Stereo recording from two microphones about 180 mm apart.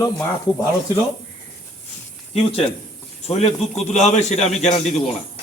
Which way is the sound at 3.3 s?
35° left (ahead or behind).